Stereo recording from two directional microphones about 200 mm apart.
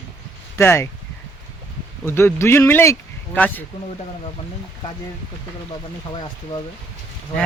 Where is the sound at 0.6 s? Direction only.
10° left (ahead or behind).